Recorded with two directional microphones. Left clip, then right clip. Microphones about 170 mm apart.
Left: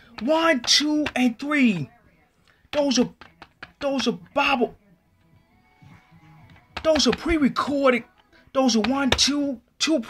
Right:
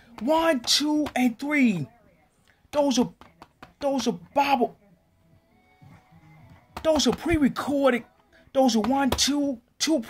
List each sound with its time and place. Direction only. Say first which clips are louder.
0.2 s speech: left 2 dB; 5° right (ahead or behind)
3.2 s a sound: left 5 dB; 25° right (ahead or behind)
3.8 s speech: left 1 dB; 5° right (ahead or behind)
7.2 s speech: left 2 dB; 5° right (ahead or behind)